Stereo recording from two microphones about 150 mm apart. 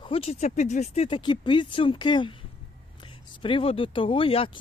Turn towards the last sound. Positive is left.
turn(degrees=35)  # may be behind; listen again after turning